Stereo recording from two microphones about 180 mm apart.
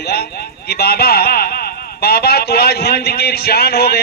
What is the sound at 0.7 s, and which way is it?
A man's voice, 60° left (ahead or behind).